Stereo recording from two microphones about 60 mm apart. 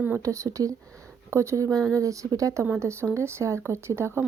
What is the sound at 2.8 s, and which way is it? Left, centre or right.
Speech, right.